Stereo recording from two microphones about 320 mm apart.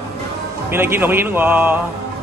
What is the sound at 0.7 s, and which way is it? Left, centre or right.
Speech, centre.